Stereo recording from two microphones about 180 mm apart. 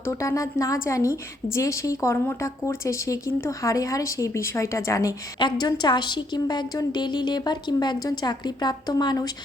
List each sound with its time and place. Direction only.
0.0 s speech: 15° left (ahead or behind)